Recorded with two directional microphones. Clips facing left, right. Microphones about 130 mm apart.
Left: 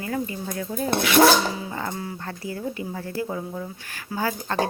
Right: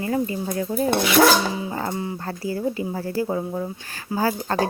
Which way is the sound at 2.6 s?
35° right (ahead or behind).